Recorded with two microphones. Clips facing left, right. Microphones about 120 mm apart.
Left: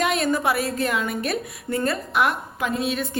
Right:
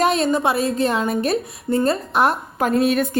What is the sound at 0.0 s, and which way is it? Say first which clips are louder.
A woman's voice: right 4 dB; 30° right (ahead or behind).